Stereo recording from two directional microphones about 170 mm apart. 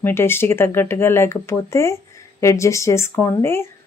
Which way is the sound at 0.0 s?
15° left (ahead or behind).